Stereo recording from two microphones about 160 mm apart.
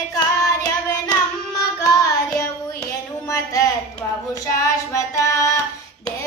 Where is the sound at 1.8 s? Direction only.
20° left (ahead or behind).